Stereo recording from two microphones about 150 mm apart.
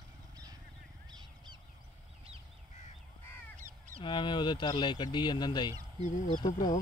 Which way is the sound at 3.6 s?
55° right (ahead or behind).